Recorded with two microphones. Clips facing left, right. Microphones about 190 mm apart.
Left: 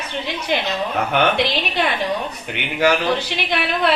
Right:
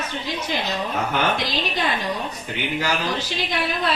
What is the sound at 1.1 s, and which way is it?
Speech, 65° left (ahead or behind).